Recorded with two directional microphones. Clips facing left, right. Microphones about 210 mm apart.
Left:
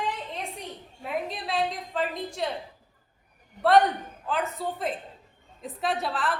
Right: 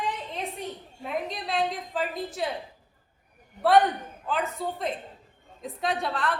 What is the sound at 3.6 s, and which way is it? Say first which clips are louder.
A woman's voice: even; centre (ahead or behind).